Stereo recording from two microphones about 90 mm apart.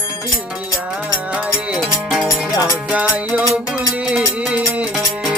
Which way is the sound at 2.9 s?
15° right (ahead or behind).